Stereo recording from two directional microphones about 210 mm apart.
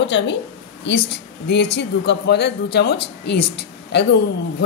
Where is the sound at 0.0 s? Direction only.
60° left (ahead or behind).